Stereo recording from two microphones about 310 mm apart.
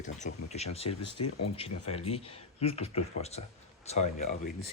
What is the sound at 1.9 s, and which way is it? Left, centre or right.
Speech, centre.